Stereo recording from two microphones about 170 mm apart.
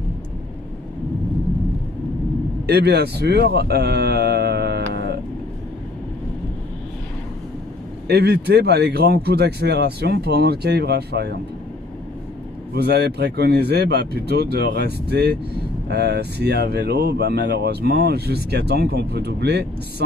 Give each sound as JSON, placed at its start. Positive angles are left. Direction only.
{"t": 2.6, "sound": "a sound", "side_deg": -70}
{"t": 8.1, "sound": "speech", "side_deg": -75}
{"t": 12.7, "sound": "speech", "side_deg": -75}